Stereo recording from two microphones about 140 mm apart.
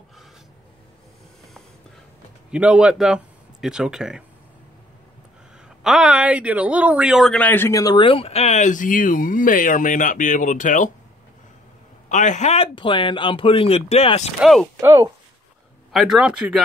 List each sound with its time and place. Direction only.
2.5 s a man's voice: 5° right (ahead or behind)
5.9 s a woman's voice: 5° right (ahead or behind); by 10.9 s 65° left (ahead or behind)
12.1 s a woman's voice: 60° left (ahead or behind)
14.4 s speech: centre (ahead or behind)
14.8 s speech: 20° right (ahead or behind)
15.9 s speech: centre (ahead or behind)